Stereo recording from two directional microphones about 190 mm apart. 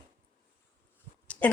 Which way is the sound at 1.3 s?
5° left (ahead or behind).